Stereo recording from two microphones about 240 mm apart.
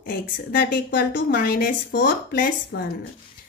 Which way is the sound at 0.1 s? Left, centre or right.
Left.